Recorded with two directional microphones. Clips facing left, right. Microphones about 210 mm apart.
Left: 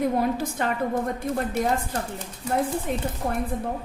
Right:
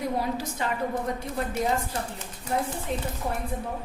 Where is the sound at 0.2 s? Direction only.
50° left (ahead or behind).